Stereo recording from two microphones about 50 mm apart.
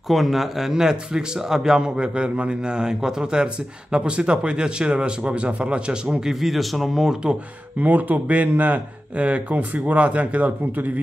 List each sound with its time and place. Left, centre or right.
0.1 s a man's voice: centre
6.4 s speech: centre
7.8 s speech: right